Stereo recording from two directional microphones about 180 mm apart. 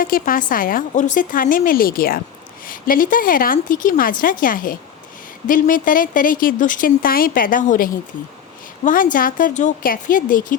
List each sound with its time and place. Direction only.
0.0 s speech: 50° left (ahead or behind)